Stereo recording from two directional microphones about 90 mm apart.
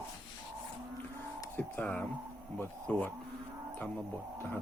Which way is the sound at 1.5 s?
20° left (ahead or behind).